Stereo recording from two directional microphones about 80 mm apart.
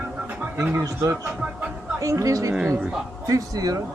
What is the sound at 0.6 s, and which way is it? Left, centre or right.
Speech, right.